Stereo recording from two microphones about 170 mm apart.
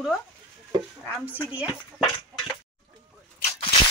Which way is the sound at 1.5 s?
5° right (ahead or behind).